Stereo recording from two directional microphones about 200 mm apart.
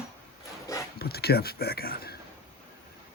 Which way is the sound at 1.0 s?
50° left (ahead or behind).